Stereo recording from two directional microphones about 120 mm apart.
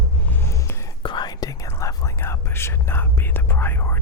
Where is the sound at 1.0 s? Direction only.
40° left (ahead or behind).